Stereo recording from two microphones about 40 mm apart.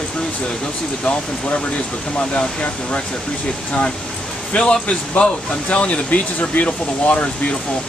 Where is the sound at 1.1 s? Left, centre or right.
Left.